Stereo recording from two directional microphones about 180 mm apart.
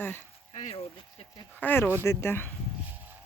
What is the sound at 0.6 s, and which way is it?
Speech, 35° left (ahead or behind).